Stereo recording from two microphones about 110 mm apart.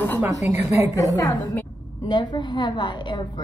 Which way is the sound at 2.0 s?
40° left (ahead or behind).